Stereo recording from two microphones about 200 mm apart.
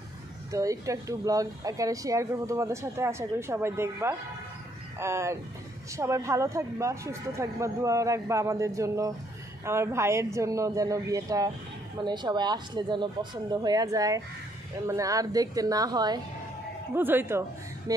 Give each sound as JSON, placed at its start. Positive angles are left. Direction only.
{"t": 0.5, "sound": "speech", "side_deg": -15}